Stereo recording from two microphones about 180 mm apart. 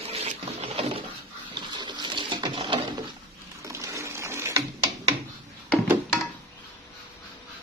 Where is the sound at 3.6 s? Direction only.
15° right (ahead or behind).